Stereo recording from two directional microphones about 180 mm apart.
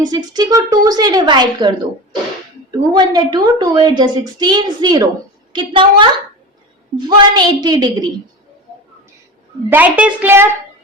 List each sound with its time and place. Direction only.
0.0 s a woman's voice: 25° right (ahead or behind)
2.9 s a woman's voice: 25° right (ahead or behind)
7.1 s a woman's voice: 25° right (ahead or behind)
9.6 s a woman's voice: 10° right (ahead or behind)